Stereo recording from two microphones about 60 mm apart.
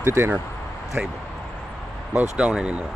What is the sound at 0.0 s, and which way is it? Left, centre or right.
Speech, right.